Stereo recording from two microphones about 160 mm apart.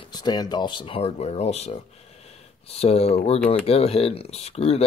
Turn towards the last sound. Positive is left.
turn(degrees=40)  # may be behind; listen again after turning